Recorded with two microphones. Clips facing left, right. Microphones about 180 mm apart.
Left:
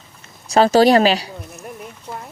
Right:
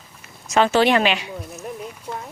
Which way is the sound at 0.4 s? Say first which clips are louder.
Left 4 dB; 35° left (ahead or behind).